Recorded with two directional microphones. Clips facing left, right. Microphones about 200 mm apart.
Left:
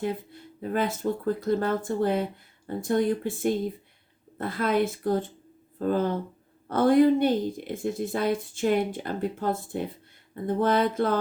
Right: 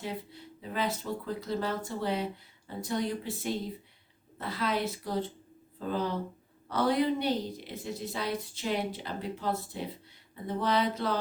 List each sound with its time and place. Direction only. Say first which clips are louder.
0.0 s a woman's voice: left 7 dB; 50° left (ahead or behind)